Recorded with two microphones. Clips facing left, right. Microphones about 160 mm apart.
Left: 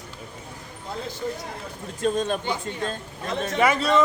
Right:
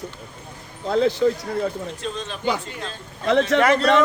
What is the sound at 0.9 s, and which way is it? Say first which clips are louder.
Speech: right 13 dB; 80° right.